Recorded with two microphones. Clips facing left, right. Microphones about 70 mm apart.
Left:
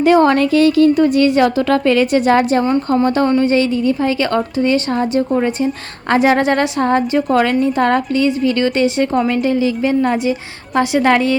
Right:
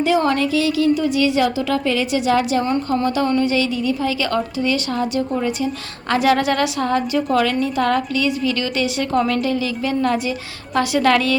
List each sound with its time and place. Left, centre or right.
0.0 s a woman's voice: left